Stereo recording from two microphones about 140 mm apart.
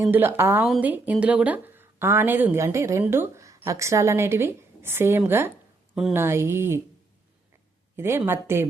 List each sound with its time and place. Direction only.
0.1 s a woman's voice: 15° right (ahead or behind)
5.9 s speech: 5° right (ahead or behind)
6.1 s a woman's voice: 20° right (ahead or behind)
7.9 s a woman's voice: 15° right (ahead or behind)